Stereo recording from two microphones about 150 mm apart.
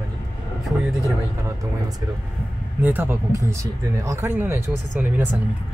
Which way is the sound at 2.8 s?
15° right (ahead or behind).